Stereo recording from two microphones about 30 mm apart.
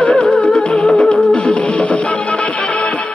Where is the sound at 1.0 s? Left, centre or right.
Left.